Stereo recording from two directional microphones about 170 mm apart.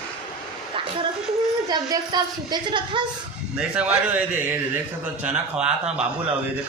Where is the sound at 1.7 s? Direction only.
20° right (ahead or behind).